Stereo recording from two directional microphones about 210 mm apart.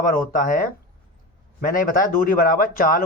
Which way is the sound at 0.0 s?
40° left (ahead or behind).